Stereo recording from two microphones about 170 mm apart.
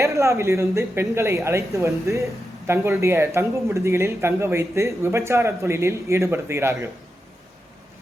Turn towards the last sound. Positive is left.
turn(degrees=-15)  # may be behind; listen again after turning